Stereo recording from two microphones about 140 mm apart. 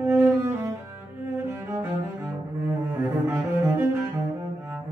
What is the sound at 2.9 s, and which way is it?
Cello, 15° right (ahead or behind).